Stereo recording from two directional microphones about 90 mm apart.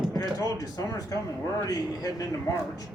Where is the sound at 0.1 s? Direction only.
40° left (ahead or behind).